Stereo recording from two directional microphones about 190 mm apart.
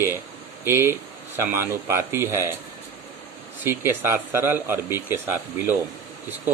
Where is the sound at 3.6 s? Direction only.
10° right (ahead or behind).